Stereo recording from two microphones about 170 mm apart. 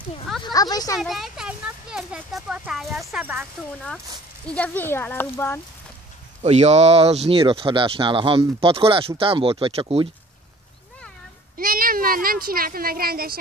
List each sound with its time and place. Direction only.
0.4 s speech: 25° left (ahead or behind)
0.9 s speech: centre (ahead or behind)
4.5 s speech: 10° left (ahead or behind)
6.4 s speech: 40° right (ahead or behind)
11.5 s speech: 55° right (ahead or behind)